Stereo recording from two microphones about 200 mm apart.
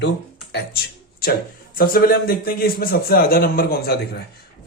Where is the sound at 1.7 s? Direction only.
50° left (ahead or behind).